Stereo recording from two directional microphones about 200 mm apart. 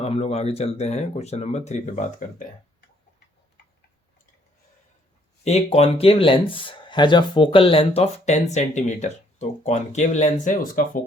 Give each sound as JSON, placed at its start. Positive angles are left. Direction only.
{"t": 0.0, "sound": "speech", "side_deg": 30}
{"t": 5.4, "sound": "speech", "side_deg": 30}